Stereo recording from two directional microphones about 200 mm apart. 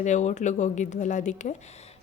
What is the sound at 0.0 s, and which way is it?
A woman's voice, 35° left (ahead or behind).